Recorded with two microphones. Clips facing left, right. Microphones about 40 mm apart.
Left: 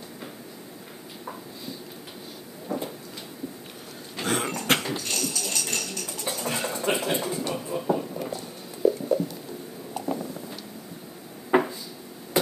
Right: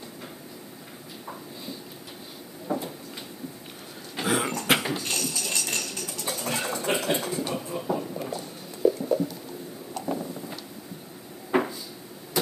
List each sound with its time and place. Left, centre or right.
2.7 s cupboard open or close: right
4.2 s cough: centre
4.8 s tambourine: centre
5.2 s music: centre
6.9 s a sound: centre
11.5 s a sound: centre